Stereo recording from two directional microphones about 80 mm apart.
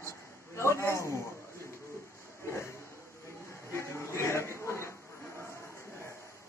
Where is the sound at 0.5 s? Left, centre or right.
Left.